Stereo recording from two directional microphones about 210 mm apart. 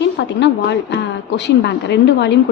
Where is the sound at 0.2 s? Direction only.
55° left (ahead or behind).